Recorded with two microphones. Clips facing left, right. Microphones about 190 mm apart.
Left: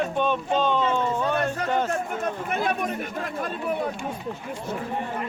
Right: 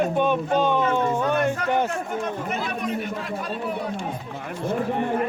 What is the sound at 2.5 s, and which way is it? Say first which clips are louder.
Chatter: left 1 dB; 50° left (ahead or behind).